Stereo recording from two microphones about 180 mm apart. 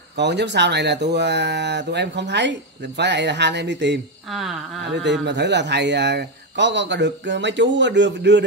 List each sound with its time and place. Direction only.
0.1 s speech: 75° right (ahead or behind)
4.3 s speech: centre (ahead or behind)
5.2 s speech: 75° right (ahead or behind)